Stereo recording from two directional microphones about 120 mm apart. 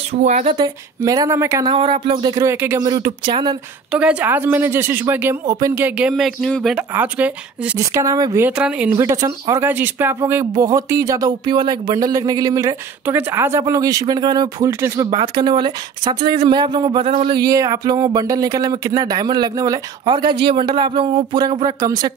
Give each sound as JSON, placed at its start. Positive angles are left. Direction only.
{"t": 0.1, "sound": "speech", "side_deg": -70}
{"t": 1.0, "sound": "speech", "side_deg": -30}
{"t": 1.7, "sound": "speech", "side_deg": -45}
{"t": 2.3, "sound": "speech", "side_deg": -20}
{"t": 2.8, "sound": "speech", "side_deg": -35}
{"t": 3.9, "sound": "speech", "side_deg": -10}
{"t": 7.9, "sound": "speech", "side_deg": -25}
{"t": 8.5, "sound": "speech", "side_deg": -10}
{"t": 8.9, "sound": "speech", "side_deg": -25}
{"t": 10.5, "sound": "speech", "side_deg": -30}
{"t": 13.0, "sound": "speech", "side_deg": -20}
{"t": 14.7, "sound": "speech", "side_deg": -20}
{"t": 15.0, "sound": "speech", "side_deg": -40}